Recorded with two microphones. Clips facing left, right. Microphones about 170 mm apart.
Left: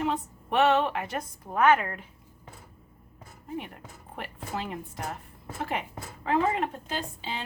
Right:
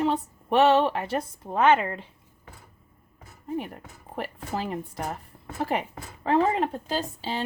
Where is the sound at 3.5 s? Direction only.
40° right (ahead or behind).